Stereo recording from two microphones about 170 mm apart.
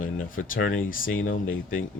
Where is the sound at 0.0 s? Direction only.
55° left (ahead or behind).